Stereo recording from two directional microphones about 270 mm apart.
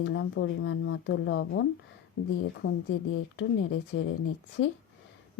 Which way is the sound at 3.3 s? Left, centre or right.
Left.